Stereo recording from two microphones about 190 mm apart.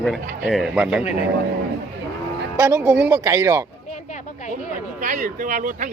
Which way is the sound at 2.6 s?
10° right (ahead or behind).